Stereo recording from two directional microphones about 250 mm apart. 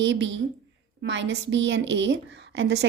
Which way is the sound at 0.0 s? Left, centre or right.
Right.